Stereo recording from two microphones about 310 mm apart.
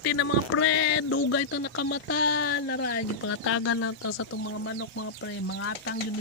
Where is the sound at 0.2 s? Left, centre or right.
Left.